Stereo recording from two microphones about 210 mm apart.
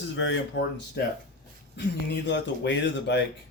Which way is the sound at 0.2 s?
60° left (ahead or behind).